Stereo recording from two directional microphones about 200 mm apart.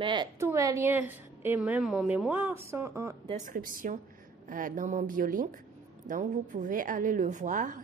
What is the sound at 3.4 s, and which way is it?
A woman's voice, 45° right (ahead or behind).